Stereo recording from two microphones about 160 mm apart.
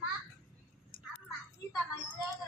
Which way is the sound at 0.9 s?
60° left (ahead or behind).